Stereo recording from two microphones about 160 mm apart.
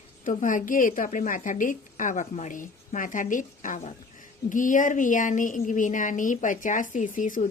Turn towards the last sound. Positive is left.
turn(degrees=55)  # may be behind; listen again after turning